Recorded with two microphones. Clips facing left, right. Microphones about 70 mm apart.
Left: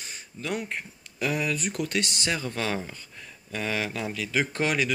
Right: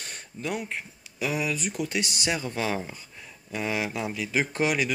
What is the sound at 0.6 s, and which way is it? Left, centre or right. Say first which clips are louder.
Speech: left 1 dB; centre.